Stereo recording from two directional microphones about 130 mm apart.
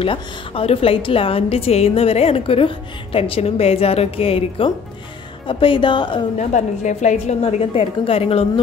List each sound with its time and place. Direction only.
0.0 s a woman's voice: 45° left (ahead or behind)
6.3 s a woman's voice: 65° left (ahead or behind)
7.4 s a woman's voice: 45° left (ahead or behind)